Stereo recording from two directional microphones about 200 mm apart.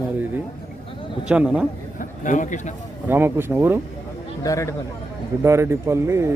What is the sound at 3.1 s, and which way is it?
Speech, 10° right (ahead or behind).